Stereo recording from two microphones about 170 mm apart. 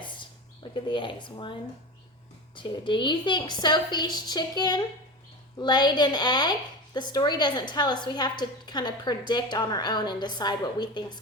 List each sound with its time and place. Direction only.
0.9 s a woman's voice: 30° left (ahead or behind)
2.6 s a woman's voice: 30° left (ahead or behind)